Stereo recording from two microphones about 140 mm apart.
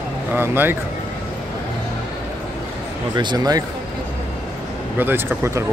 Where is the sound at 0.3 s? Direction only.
15° right (ahead or behind).